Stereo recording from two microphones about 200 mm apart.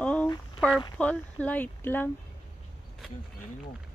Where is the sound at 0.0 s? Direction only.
5° left (ahead or behind).